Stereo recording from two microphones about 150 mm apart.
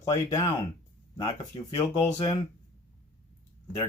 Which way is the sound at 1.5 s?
40° left (ahead or behind).